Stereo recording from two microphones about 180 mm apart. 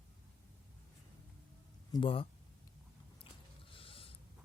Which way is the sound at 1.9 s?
30° left (ahead or behind).